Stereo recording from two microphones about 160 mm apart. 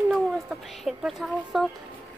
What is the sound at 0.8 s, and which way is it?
Speech, 5° right (ahead or behind).